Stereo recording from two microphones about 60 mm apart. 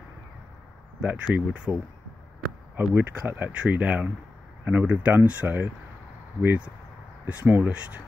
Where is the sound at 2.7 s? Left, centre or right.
Right.